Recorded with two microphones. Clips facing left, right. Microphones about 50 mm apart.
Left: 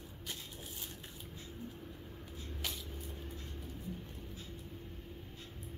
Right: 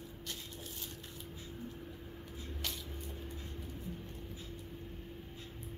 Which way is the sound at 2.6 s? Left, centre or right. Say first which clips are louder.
Even; centre.